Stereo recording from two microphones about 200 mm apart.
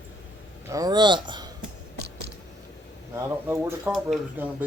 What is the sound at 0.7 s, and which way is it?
Speech, 20° right (ahead or behind).